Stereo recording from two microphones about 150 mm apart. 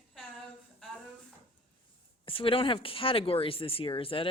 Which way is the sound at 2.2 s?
35° left (ahead or behind).